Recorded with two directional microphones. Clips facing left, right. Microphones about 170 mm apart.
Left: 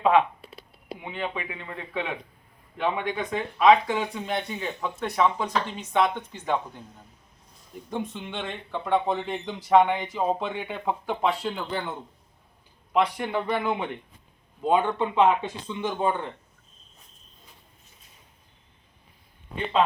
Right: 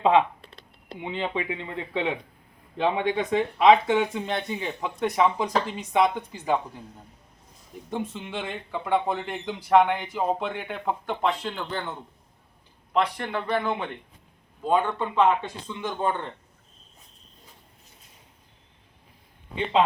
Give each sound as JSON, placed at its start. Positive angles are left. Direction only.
{"t": 0.0, "sound": "speech", "side_deg": -25}
{"t": 0.4, "sound": "a sound", "side_deg": 10}
{"t": 0.9, "sound": "speech", "side_deg": -25}
{"t": 7.9, "sound": "speech", "side_deg": 0}
{"t": 14.7, "sound": "a man's voice", "side_deg": 20}
{"t": 15.0, "sound": "speech", "side_deg": 10}